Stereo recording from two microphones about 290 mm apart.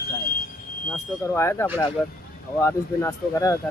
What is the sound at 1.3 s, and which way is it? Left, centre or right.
Speech, centre.